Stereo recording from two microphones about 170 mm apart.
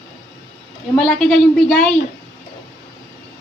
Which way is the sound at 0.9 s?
5° left (ahead or behind).